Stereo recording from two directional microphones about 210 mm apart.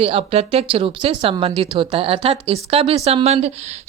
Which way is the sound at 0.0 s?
25° right (ahead or behind).